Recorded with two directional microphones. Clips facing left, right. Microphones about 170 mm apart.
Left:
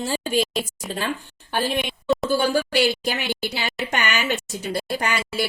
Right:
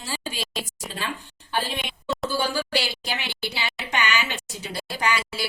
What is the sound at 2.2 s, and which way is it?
Speech, 55° left (ahead or behind).